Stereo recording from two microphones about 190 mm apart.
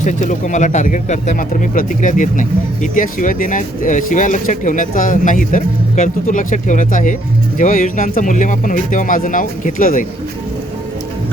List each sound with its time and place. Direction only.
0.0 s speech: 40° left (ahead or behind)